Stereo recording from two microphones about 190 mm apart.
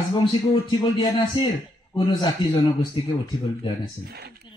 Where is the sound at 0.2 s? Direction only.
25° left (ahead or behind).